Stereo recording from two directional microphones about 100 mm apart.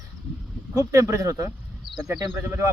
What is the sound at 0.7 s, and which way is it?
Speech, 35° right (ahead or behind).